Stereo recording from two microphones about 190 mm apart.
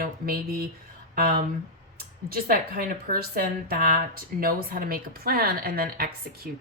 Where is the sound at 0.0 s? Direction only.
50° right (ahead or behind).